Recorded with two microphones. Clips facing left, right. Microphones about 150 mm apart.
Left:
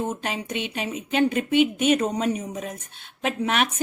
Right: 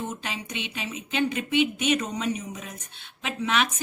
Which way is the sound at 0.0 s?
50° left (ahead or behind).